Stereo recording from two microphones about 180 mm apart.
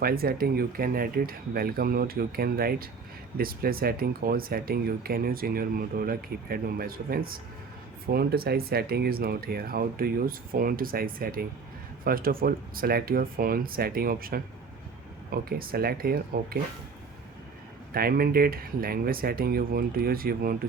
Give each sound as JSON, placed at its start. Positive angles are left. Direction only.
{"t": 0.0, "sound": "speech", "side_deg": -55}
{"t": 17.9, "sound": "speech", "side_deg": -55}